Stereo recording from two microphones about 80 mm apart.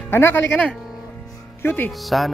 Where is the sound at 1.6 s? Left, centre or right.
Left.